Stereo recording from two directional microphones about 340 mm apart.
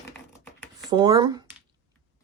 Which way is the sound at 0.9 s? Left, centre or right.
Centre.